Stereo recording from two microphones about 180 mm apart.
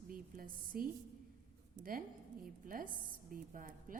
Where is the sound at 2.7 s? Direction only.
50° right (ahead or behind).